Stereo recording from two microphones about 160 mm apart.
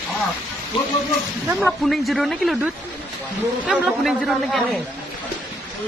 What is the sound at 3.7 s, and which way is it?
Speech, centre (ahead or behind).